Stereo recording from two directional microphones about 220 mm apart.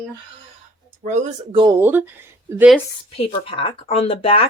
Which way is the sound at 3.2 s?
25° left (ahead or behind).